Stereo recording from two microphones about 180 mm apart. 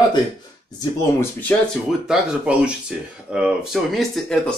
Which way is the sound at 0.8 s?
10° left (ahead or behind).